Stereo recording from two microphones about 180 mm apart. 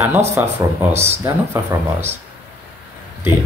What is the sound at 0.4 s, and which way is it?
Speech, 10° right (ahead or behind).